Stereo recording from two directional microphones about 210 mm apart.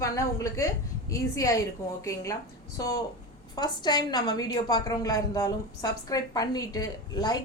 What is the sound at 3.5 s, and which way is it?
A woman's voice, 20° left (ahead or behind).